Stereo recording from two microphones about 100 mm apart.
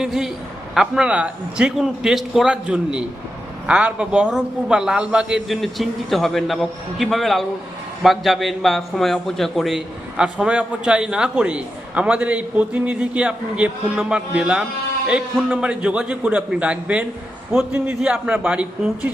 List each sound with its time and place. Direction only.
0.0 s a man's voice: centre (ahead or behind)
5.6 s a man's voice: centre (ahead or behind)